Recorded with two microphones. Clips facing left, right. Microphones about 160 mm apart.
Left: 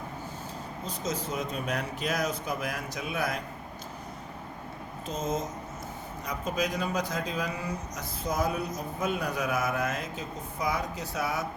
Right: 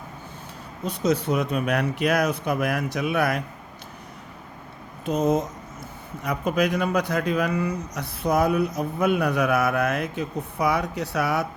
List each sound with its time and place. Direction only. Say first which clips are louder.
0.9 s speech: right 11 dB; 65° right (ahead or behind)
5.0 s speech: right 10 dB; 65° right (ahead or behind)